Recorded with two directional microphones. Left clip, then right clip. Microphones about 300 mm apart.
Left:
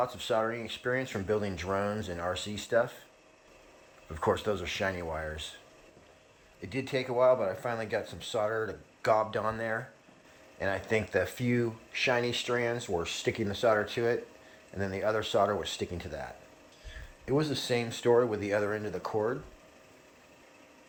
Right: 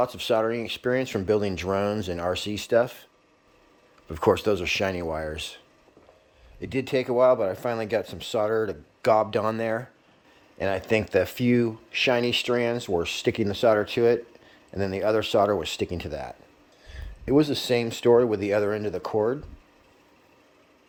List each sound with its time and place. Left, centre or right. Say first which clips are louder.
0.0 s speech: right 6 dB; right
4.1 s speech: right 8 dB; right
6.6 s speech: right 7 dB; right